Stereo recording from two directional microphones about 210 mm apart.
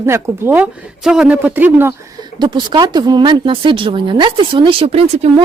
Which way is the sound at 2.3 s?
20° right (ahead or behind).